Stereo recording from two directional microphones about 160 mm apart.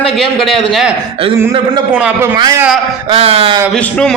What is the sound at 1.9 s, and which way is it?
Speech, 10° right (ahead or behind).